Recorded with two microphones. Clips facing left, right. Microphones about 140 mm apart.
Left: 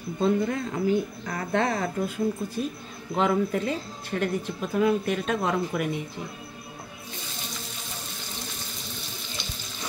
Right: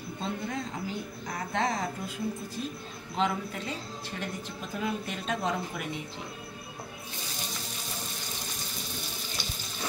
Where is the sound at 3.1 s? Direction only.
55° left (ahead or behind).